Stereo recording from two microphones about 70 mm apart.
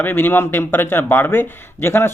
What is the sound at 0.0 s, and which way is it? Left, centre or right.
A man's voice, left.